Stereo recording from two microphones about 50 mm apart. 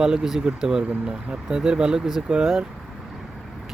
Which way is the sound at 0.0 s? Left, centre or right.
Centre.